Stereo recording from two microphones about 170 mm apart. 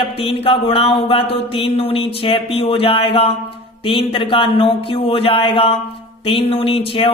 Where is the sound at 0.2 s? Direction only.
35° left (ahead or behind).